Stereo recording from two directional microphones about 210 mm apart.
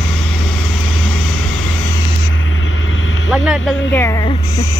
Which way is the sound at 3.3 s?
Centre (ahead or behind).